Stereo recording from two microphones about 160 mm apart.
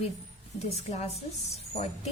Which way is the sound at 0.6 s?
45° left (ahead or behind).